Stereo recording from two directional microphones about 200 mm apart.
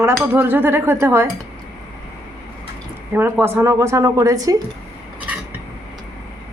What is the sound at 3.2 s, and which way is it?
A woman's voice, 10° right (ahead or behind).